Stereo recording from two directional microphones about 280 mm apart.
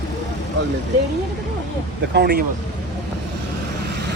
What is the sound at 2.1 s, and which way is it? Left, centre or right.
Speech, right.